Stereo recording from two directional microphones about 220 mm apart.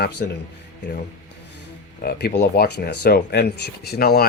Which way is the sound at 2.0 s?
45° left (ahead or behind).